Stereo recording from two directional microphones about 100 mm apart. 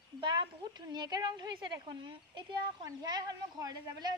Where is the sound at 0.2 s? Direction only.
50° right (ahead or behind).